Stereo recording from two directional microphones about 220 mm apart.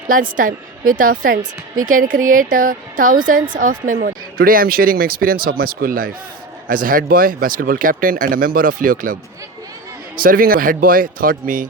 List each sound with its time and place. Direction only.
0.1 s speech: 40° right (ahead or behind)
10.2 s speech: 40° right (ahead or behind)